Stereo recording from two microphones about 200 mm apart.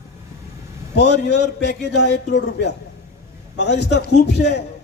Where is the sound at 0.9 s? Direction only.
60° left (ahead or behind).